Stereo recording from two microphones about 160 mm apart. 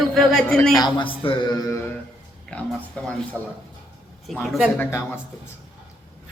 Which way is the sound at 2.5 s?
5° left (ahead or behind).